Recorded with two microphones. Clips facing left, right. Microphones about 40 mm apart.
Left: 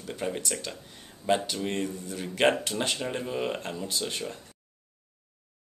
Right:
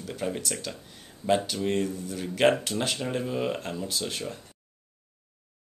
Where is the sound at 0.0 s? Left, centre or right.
Centre.